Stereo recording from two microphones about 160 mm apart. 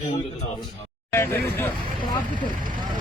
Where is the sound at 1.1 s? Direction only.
15° left (ahead or behind).